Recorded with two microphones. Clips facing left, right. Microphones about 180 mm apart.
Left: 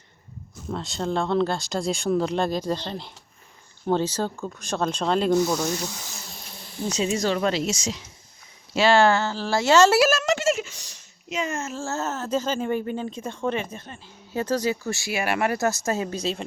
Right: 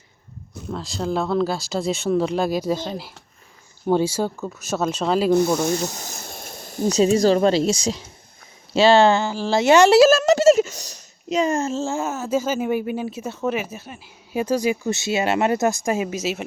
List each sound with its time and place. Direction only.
0.7 s speech: centre (ahead or behind)
5.3 s speech: 55° right (ahead or behind); by 10.1 s 15° right (ahead or behind)
10.1 s a sound: 35° right (ahead or behind)
11.8 s speech: 15° right (ahead or behind)